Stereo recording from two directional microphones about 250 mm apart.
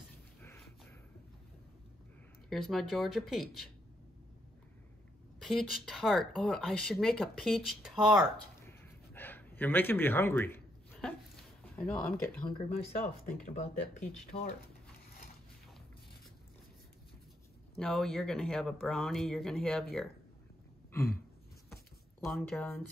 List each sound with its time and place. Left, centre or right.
2.5 s speech: centre
5.4 s speech: centre
8.5 s a sound: centre
11.7 s speech: centre
12.4 s speech: left
17.7 s speech: centre
22.2 s speech: centre